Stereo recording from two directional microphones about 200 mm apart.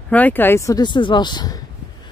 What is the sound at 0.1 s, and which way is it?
Speech, 10° left (ahead or behind).